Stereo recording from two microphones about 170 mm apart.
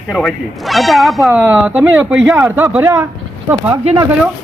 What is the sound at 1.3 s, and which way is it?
A man's voice, 10° right (ahead or behind).